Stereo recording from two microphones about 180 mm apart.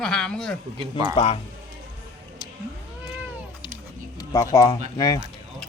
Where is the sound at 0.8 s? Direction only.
25° right (ahead or behind).